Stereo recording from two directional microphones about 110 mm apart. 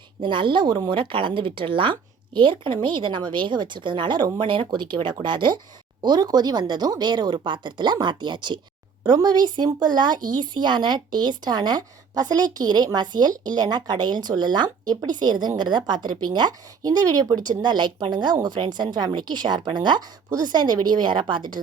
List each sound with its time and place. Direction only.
0.2 s speech: 45° right (ahead or behind)